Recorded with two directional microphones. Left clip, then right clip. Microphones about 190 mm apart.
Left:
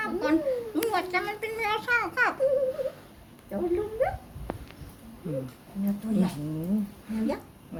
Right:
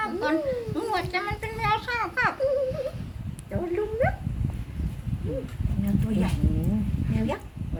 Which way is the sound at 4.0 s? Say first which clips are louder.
Right 2 dB; 10° right (ahead or behind).